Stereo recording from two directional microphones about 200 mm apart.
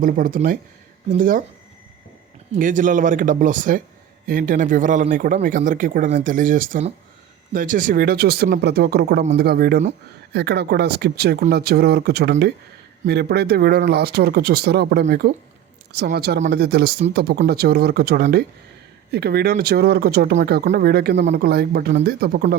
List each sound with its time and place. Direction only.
0.0 s speech: 45° right (ahead or behind)
2.6 s speech: 40° right (ahead or behind)